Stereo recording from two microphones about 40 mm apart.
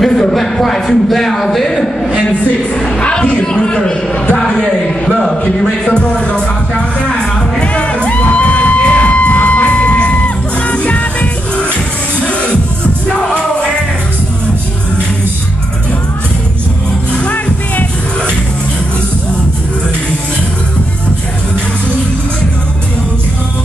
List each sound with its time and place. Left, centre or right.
0.0 s a man's voice: centre
3.0 s speech: left
4.4 s a sound: centre
5.9 s music: left
7.6 s music: left